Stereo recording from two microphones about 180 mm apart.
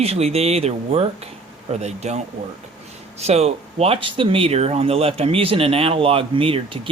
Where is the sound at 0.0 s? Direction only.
35° right (ahead or behind).